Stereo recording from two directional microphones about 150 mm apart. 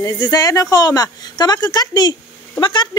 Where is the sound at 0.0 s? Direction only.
25° left (ahead or behind).